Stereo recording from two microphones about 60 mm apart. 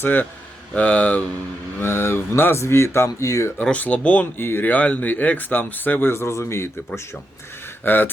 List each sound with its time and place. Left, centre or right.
0.0 s speech: left
1.8 s speech: left
3.6 s speech: left
4.4 s speech: left
6.2 s speech: left
7.9 s speech: left